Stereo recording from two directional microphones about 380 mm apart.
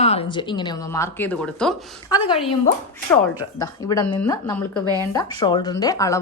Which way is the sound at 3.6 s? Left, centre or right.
Centre.